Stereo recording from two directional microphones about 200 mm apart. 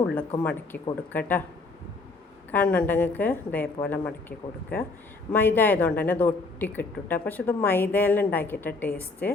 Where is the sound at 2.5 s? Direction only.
5° left (ahead or behind).